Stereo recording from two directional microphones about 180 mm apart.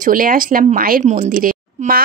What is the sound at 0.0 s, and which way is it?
Speech, 50° right (ahead or behind).